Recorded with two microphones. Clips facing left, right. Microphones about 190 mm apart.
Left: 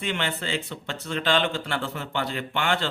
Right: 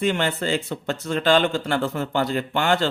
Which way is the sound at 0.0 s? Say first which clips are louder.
Right 7 dB; 40° right (ahead or behind).